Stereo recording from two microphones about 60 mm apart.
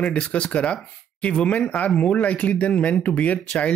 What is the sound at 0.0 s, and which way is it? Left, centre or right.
Speech, left.